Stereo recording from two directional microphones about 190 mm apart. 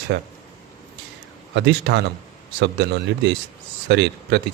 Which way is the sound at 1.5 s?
65° right (ahead or behind).